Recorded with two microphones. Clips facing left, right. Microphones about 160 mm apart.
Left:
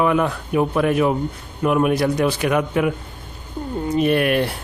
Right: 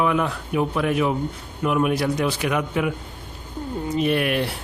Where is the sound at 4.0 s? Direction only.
50° left (ahead or behind).